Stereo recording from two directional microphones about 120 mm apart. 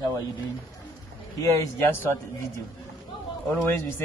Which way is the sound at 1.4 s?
25° left (ahead or behind).